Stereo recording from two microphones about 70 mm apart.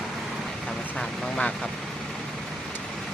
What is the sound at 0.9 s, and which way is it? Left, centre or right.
Speech, centre.